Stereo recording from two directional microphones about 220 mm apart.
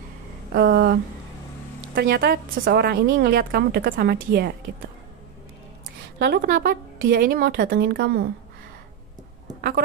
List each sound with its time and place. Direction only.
0.5 s a woman's voice: 45° right (ahead or behind)
2.0 s a woman's voice: 40° right (ahead or behind)
6.1 s a woman's voice: 45° right (ahead or behind)
9.6 s speech: 45° right (ahead or behind)